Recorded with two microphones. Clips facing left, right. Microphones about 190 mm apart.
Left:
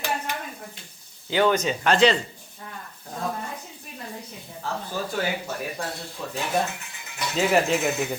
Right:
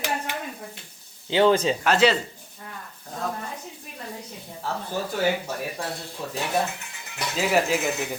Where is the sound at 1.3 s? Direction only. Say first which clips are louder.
Right 2 dB; 25° right (ahead or behind).